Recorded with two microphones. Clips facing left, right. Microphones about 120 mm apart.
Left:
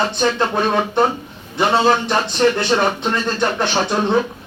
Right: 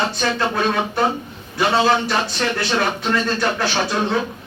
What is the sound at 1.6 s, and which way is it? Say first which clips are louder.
Speech: left 2 dB; 25° left (ahead or behind).